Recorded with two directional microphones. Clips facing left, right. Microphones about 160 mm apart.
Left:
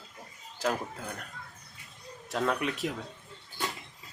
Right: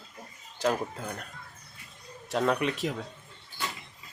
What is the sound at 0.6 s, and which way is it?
Speech, 5° left (ahead or behind).